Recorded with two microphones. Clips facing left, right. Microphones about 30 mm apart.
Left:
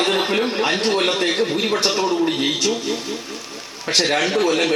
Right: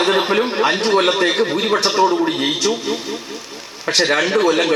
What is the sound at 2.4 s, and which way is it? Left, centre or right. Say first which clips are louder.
Speech: right 2 dB; centre.